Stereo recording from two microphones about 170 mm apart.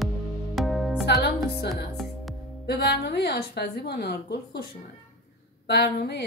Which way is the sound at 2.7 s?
80° left.